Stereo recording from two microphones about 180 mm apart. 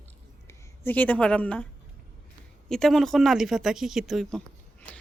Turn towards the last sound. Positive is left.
turn(degrees=0)  # may be behind; listen again after turning